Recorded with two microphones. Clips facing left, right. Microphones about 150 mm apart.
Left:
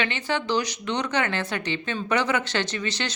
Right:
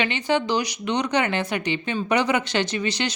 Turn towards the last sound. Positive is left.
turn(degrees=-15)  # may be behind; listen again after turning